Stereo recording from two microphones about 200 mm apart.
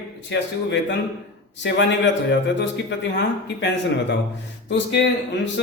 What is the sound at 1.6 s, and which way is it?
A man's voice, 65° left (ahead or behind).